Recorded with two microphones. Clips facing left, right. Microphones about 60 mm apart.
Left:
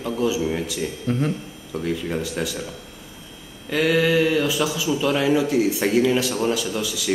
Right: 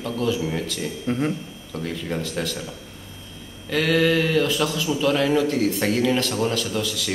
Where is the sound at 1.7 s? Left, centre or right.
Centre.